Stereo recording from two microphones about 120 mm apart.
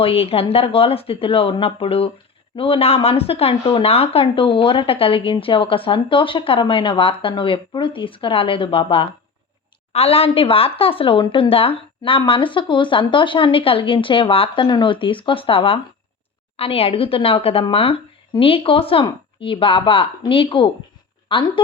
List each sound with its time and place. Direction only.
0.0 s speech: 55° left (ahead or behind)